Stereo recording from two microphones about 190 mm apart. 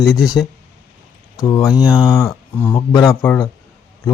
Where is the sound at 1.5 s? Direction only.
20° left (ahead or behind).